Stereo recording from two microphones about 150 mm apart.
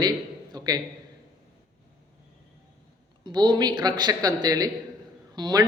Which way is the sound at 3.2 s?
30° right (ahead or behind).